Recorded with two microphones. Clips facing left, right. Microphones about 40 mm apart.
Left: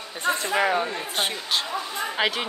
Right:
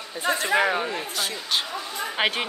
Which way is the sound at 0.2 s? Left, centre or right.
Right.